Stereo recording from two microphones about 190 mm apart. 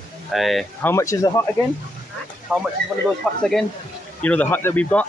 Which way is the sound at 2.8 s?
5° left (ahead or behind).